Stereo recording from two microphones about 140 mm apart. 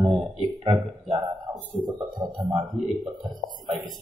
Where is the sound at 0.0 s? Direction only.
45° right (ahead or behind).